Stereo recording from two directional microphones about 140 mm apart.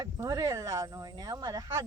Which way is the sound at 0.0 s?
25° right (ahead or behind).